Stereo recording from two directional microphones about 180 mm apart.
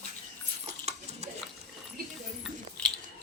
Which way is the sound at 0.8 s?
35° right (ahead or behind).